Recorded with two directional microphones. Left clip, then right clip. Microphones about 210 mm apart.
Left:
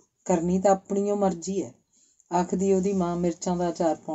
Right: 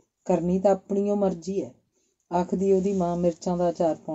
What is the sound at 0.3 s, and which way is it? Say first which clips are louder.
Speech: even; 40° right (ahead or behind).